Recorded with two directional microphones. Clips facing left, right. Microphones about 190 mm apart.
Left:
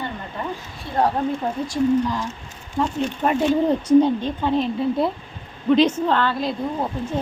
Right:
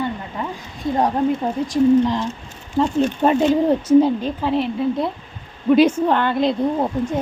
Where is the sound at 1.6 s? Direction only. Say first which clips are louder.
Right 5 dB; 20° right (ahead or behind).